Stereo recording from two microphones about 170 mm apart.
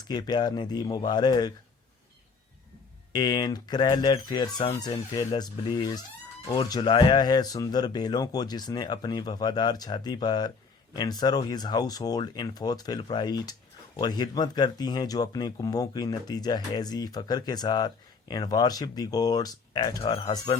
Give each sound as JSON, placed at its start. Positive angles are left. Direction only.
{"t": 0.1, "sound": "speech", "side_deg": 25}
{"t": 3.1, "sound": "speech", "side_deg": 25}